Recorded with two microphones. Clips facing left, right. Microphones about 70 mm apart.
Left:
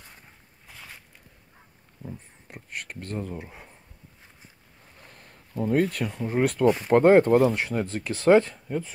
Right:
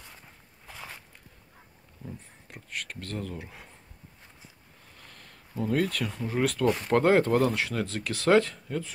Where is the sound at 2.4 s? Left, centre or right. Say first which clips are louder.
Even; left.